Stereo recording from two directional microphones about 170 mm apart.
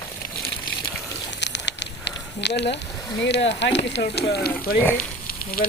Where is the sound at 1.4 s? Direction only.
90° left.